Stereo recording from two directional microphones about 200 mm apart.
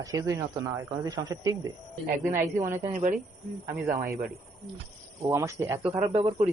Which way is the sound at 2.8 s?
35° right (ahead or behind).